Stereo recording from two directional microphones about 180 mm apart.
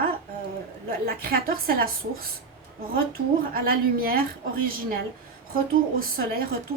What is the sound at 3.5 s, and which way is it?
Speech, 55° right (ahead or behind).